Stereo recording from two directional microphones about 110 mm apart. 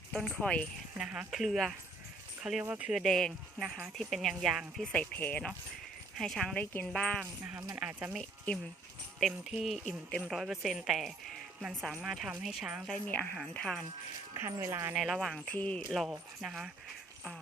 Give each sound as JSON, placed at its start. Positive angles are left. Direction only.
{"t": 0.1, "sound": "a woman's voice", "side_deg": 0}
{"t": 0.9, "sound": "a woman's voice", "side_deg": -5}
{"t": 3.0, "sound": "a woman's voice", "side_deg": 5}
{"t": 6.1, "sound": "a woman's voice", "side_deg": 5}
{"t": 7.8, "sound": "speech", "side_deg": -10}
{"t": 8.1, "sound": "a woman's voice", "side_deg": 5}
{"t": 12.9, "sound": "a woman's voice", "side_deg": 15}
{"t": 14.3, "sound": "speech", "side_deg": -25}
{"t": 14.9, "sound": "a woman's voice", "side_deg": 0}
{"t": 15.4, "sound": "a woman's voice", "side_deg": 15}
{"t": 15.9, "sound": "a woman's voice", "side_deg": -5}